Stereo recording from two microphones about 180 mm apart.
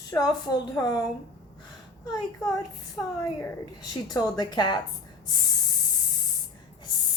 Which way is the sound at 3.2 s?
20° left (ahead or behind).